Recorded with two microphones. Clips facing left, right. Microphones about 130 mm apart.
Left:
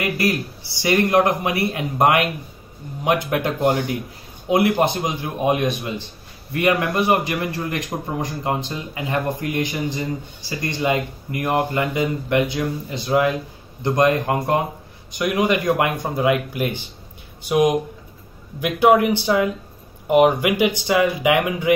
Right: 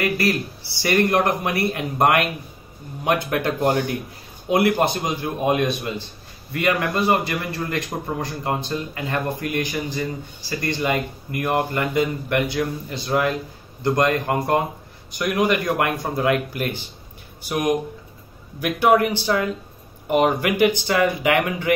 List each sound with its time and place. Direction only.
0.0 s a man's voice: 15° left (ahead or behind)